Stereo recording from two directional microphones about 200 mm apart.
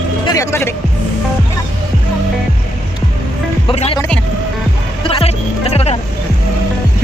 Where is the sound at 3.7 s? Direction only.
25° left (ahead or behind).